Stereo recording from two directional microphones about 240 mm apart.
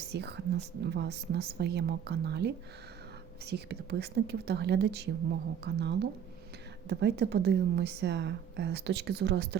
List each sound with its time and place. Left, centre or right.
0.1 s a woman's voice: right